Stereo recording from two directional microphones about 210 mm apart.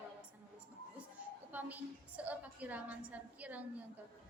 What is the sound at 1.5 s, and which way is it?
A woman's voice, 5° right (ahead or behind).